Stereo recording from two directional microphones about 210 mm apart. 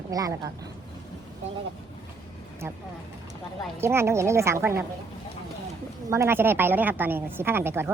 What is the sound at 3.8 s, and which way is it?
A woman's voice, 10° right (ahead or behind).